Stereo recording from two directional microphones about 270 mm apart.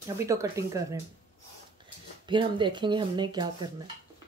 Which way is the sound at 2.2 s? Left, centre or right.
Centre.